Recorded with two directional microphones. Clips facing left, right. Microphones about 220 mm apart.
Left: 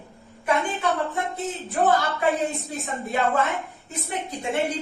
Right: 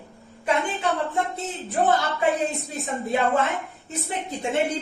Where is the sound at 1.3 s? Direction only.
30° right (ahead or behind).